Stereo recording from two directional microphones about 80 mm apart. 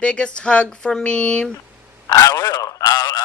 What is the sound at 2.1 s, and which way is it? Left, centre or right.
Speech, left.